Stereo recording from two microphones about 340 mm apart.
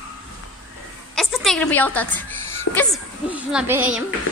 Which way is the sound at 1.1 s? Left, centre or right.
Centre.